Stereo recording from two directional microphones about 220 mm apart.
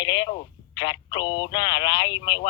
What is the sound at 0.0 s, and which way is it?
Speech, 20° left (ahead or behind).